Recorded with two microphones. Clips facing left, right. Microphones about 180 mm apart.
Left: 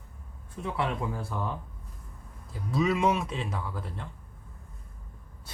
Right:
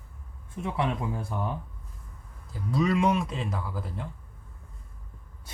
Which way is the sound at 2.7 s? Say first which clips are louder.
Right 1 dB; centre (ahead or behind).